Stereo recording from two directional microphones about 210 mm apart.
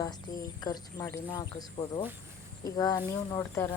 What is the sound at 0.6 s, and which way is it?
Speech, 20° left (ahead or behind).